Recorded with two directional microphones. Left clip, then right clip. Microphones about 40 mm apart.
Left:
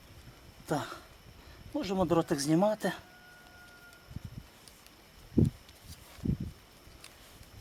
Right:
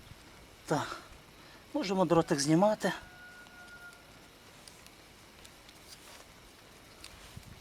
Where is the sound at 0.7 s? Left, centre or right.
Right.